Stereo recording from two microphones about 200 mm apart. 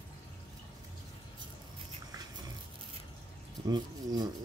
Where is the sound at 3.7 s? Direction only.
20° right (ahead or behind).